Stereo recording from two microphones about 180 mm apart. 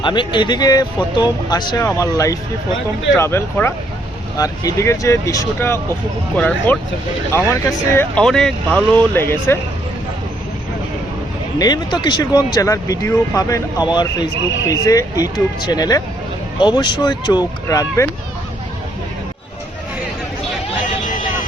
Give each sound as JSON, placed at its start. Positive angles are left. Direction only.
{"t": 0.0, "sound": "speech", "side_deg": 25}
{"t": 11.6, "sound": "speech", "side_deg": 25}